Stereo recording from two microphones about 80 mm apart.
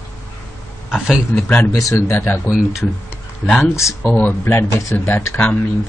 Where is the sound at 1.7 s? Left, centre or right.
Left.